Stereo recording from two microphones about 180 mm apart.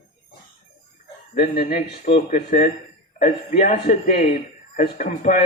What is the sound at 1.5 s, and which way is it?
A man's voice, 45° left (ahead or behind).